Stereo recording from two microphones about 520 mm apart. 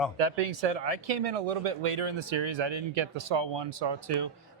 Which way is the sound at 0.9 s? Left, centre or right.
Right.